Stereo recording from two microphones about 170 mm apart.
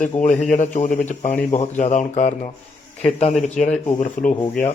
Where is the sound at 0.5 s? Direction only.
50° left (ahead or behind).